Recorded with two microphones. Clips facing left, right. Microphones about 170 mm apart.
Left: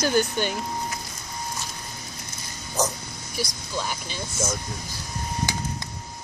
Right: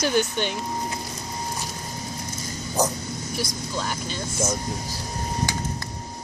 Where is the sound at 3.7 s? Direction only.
10° left (ahead or behind).